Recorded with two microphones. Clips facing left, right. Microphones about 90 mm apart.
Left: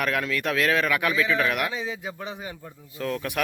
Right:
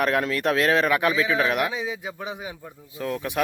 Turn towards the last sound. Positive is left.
turn(degrees=-20)  # may be behind; listen again after turning